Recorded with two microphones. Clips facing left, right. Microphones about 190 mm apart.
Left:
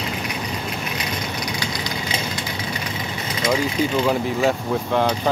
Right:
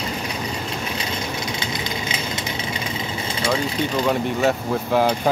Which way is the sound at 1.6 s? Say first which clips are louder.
Even; 25° right (ahead or behind).